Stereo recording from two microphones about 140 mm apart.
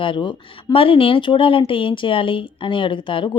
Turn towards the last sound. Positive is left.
turn(degrees=35)  # may be behind; listen again after turning